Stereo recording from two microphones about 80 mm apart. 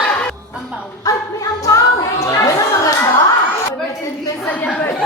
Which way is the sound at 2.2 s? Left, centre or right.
Left.